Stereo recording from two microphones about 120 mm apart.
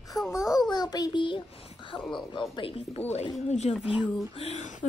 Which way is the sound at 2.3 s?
45° left (ahead or behind).